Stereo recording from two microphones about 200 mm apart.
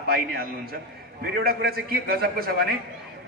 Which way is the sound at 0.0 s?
50° right (ahead or behind).